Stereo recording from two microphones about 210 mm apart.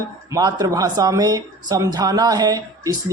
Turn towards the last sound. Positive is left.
turn(degrees=-20)  # may be behind; listen again after turning